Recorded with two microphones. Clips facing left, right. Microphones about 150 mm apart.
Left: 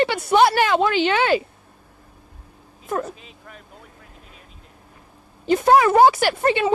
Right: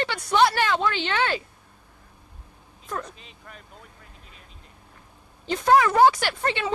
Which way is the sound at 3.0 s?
Centre (ahead or behind).